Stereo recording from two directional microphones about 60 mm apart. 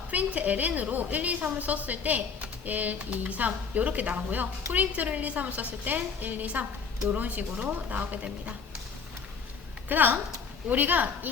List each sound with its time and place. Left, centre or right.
0.1 s a woman's voice: right
9.9 s a woman's voice: right